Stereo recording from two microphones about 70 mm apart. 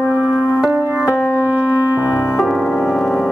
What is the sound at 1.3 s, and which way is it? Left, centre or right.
Music, centre.